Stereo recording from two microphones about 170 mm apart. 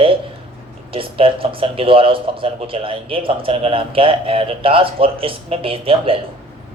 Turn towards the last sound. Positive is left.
turn(degrees=-35)  # may be behind; listen again after turning